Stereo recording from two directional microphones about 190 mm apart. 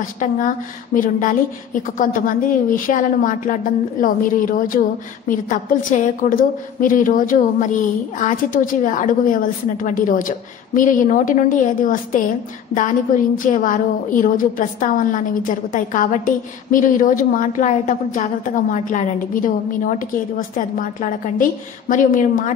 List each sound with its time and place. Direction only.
0.9 s a woman's voice: 45° left (ahead or behind)